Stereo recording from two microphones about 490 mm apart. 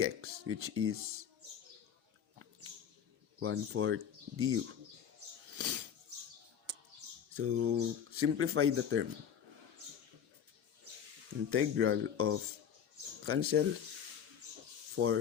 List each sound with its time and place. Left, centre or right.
0.0 s speech: right
3.4 s speech: right
5.5 s a sound: right
7.3 s speech: right
11.5 s speech: right
14.9 s speech: right